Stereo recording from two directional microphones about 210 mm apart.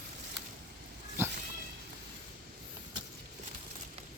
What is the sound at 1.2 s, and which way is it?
Cat, 10° right (ahead or behind).